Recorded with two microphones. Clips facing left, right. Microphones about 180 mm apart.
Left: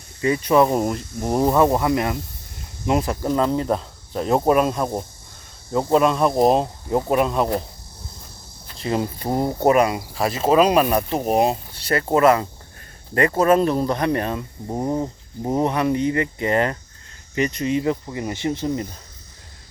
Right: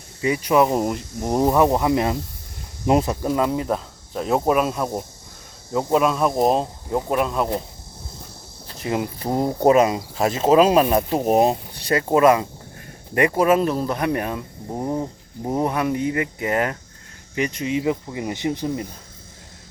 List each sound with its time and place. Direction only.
0.2 s speech: 10° right (ahead or behind)
3.2 s speech: 10° right (ahead or behind)
8.8 s speech: 10° right (ahead or behind)
9.3 s speech: 5° left (ahead or behind)
9.6 s speech: 20° right (ahead or behind)
11.2 s speech: centre (ahead or behind)
11.7 s a sound: 15° right (ahead or behind)
12.1 s speech: 15° right (ahead or behind)